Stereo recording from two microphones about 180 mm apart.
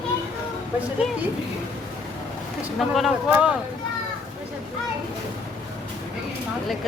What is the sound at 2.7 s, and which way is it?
Speech, centre (ahead or behind).